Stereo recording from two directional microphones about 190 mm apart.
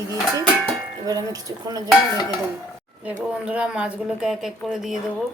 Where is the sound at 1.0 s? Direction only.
20° right (ahead or behind).